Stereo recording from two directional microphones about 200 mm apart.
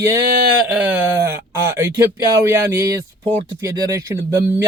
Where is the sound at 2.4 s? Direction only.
15° right (ahead or behind).